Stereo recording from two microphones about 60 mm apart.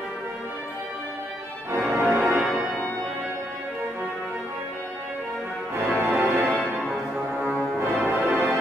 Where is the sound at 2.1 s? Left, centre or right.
Right.